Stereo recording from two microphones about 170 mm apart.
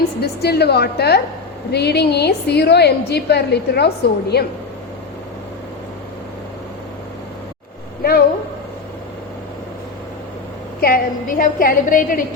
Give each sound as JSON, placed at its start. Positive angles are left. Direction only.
{"t": 0.2, "sound": "a woman's voice", "side_deg": 70}
{"t": 10.8, "sound": "a woman's voice", "side_deg": 60}